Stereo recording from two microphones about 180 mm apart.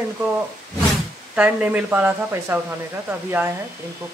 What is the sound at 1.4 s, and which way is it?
Speech, 10° right (ahead or behind).